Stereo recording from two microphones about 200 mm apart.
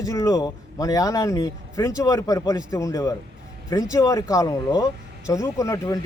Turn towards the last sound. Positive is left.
turn(degrees=15)  # may be behind; listen again after turning